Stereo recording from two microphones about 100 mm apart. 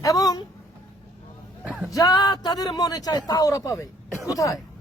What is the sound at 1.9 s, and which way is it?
Speech, 40° left (ahead or behind).